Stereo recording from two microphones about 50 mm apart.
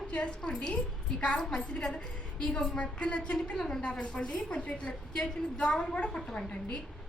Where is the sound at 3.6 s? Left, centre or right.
Centre.